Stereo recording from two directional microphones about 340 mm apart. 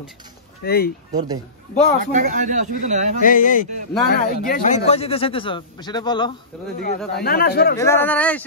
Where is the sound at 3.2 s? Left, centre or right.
Left.